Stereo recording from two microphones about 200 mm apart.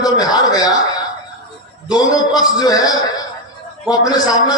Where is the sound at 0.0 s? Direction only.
20° left (ahead or behind).